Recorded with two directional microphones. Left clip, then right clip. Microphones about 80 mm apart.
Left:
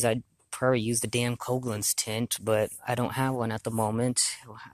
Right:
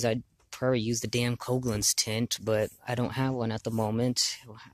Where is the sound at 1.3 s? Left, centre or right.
Right.